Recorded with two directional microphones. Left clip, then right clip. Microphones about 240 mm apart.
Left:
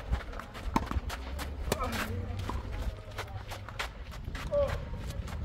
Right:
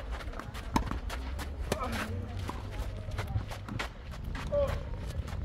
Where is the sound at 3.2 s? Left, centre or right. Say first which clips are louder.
Left 1 dB; centre.